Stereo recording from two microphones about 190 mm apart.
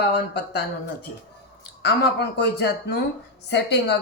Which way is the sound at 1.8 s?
60° left (ahead or behind).